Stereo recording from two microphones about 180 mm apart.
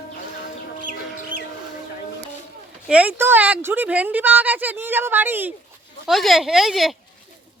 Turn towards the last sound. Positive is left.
turn(degrees=0)  # may be behind; listen again after turning